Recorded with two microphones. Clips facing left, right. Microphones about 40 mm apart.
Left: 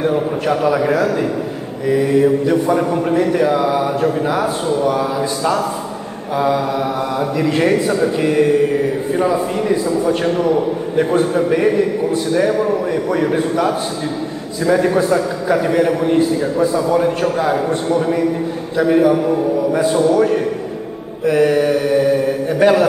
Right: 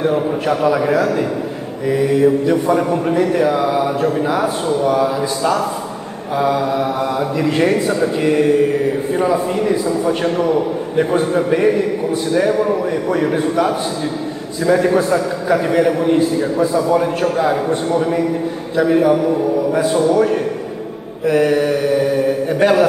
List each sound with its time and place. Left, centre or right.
0.0 s speech: centre
21.3 s mantra: centre